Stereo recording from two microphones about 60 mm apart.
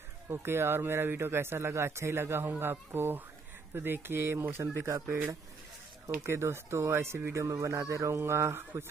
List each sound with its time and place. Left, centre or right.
0.3 s a man's voice: right
7.3 s a man's voice: right